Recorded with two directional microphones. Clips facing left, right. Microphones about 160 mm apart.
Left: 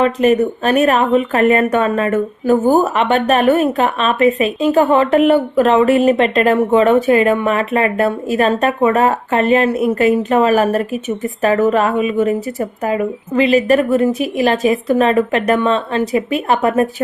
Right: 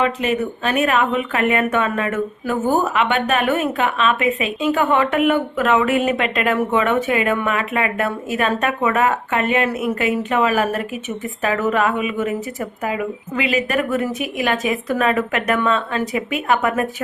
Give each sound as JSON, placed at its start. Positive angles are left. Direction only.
{"t": 0.0, "sound": "speech", "side_deg": 40}